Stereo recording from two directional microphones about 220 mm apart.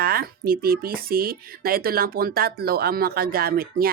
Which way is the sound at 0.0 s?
45° right (ahead or behind).